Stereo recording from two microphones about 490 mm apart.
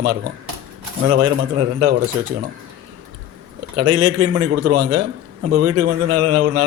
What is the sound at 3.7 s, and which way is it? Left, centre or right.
Speech, right.